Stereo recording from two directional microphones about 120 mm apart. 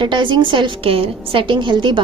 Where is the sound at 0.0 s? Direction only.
40° right (ahead or behind).